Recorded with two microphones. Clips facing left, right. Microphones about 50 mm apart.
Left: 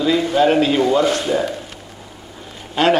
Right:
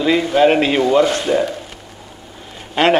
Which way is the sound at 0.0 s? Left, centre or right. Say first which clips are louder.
Right 2 dB; right.